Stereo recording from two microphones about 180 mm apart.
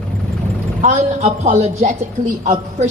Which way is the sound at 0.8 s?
40° right (ahead or behind).